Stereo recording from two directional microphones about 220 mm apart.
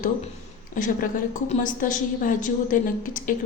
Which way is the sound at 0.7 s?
35° left (ahead or behind).